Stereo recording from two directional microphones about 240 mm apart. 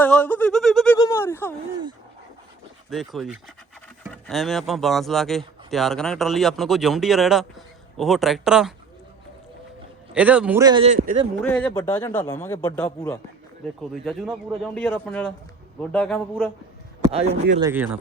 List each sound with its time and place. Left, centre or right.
0.0 s a sound: centre
0.9 s a sound: centre
2.9 s speech: centre
10.2 s a man's voice: centre
10.9 s speech: right
11.4 s speech: centre
13.9 s speech: centre
17.1 s a man's voice: right
17.7 s a man's voice: centre